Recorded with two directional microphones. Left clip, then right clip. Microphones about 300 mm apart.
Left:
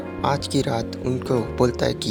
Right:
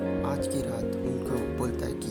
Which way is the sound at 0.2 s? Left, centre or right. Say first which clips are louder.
Left 7 dB; right.